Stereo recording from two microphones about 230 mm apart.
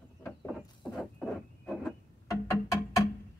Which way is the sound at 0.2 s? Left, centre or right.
Centre.